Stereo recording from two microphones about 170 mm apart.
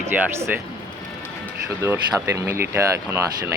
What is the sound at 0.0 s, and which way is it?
Speech, 15° right (ahead or behind).